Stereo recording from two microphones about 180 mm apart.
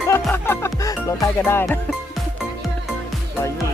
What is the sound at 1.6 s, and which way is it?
Speech, centre (ahead or behind).